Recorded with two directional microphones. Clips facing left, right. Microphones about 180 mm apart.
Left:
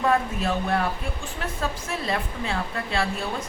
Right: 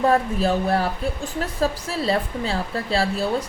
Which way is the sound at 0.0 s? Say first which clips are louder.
Right 4 dB; 35° right (ahead or behind).